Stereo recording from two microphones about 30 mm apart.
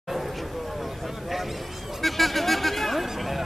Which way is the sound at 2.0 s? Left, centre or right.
Centre.